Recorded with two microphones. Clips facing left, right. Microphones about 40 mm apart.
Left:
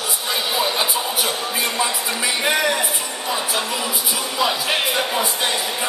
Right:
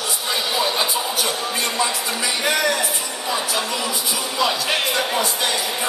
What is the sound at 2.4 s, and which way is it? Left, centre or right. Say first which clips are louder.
Speech: left 1 dB; centre.